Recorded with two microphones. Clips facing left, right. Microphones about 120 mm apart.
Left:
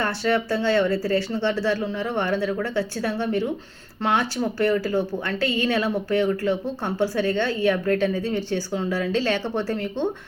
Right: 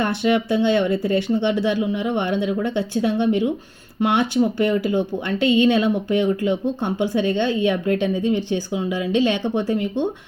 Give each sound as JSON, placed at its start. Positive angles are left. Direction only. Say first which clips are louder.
{"t": 0.0, "sound": "speech", "louder": "right 3 dB", "side_deg": -15}